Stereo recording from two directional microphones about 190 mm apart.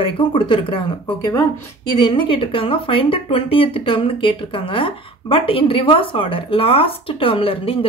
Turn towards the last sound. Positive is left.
turn(degrees=30)  # may be behind; listen again after turning